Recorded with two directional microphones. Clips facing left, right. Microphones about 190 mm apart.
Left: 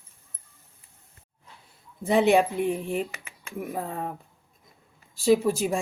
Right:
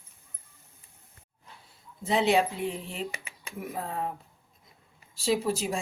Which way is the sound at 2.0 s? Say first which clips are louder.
Left 4 dB; 55° left (ahead or behind).